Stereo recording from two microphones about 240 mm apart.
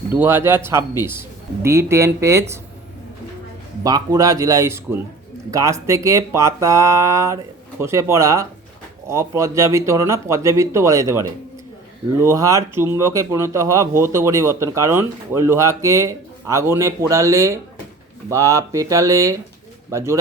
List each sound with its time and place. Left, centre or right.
0.1 s speech: centre
3.8 s speech: centre